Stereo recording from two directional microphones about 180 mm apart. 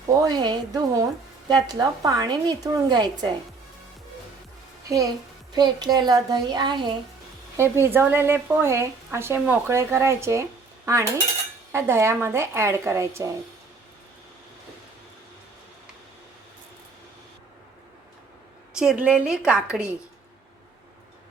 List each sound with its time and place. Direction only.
0.2 s a woman's voice: 20° right (ahead or behind)
5.5 s a woman's voice: 25° right (ahead or behind)
7.5 s speech: 15° right (ahead or behind)
10.8 s cutlery: 15° right (ahead or behind)
11.7 s speech: 15° right (ahead or behind)
18.8 s a woman's voice: 5° right (ahead or behind)